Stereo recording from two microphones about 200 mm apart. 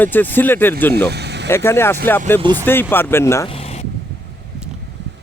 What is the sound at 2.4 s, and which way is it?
Speech, 20° right (ahead or behind).